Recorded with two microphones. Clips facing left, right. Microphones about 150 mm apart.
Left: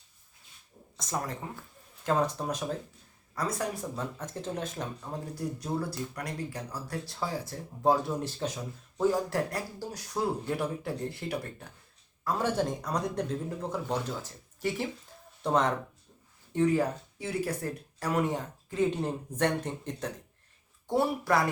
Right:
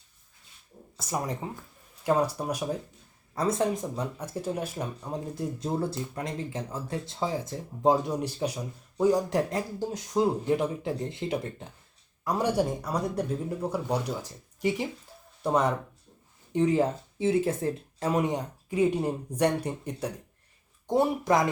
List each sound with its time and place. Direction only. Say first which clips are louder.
0.9 s speech: right 3 dB; 10° right (ahead or behind)
3.3 s speech: right 6 dB; 25° right (ahead or behind); by 15.8 s 10° right (ahead or behind)
16.5 s speech: right 2 dB; 20° right (ahead or behind)